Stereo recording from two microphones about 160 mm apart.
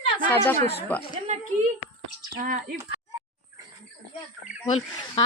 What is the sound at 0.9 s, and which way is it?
Speech, 10° left (ahead or behind).